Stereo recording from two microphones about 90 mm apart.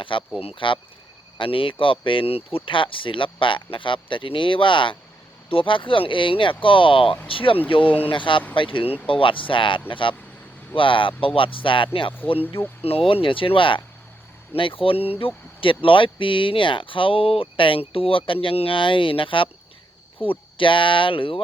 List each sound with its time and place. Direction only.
0.0 s speech: 70° left (ahead or behind)
0.3 s speech: 80° left
8.0 s speech: 65° left (ahead or behind)
12.4 s speech: 25° left (ahead or behind)
12.8 s speech: 90° left; by 13.8 s 70° left (ahead or behind)
14.5 s speech: 80° left
15.6 s speech: 75° left (ahead or behind)